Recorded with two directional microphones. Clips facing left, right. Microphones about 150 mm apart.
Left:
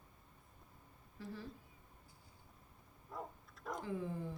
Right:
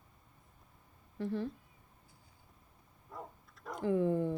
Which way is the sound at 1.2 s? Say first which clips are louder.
Right 11 dB; 60° right (ahead or behind).